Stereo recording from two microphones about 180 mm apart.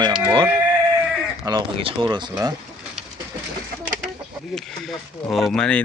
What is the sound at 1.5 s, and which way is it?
Speech, 30° right (ahead or behind).